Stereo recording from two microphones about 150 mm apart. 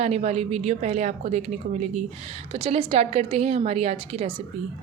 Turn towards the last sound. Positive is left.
turn(degrees=-45)  # may be behind; listen again after turning